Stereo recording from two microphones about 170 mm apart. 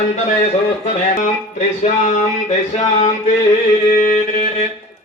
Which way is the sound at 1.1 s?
45° left (ahead or behind).